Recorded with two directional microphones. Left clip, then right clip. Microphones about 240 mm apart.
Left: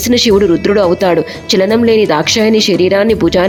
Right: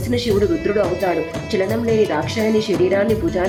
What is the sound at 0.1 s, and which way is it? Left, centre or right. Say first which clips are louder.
Speech: left 9 dB; left.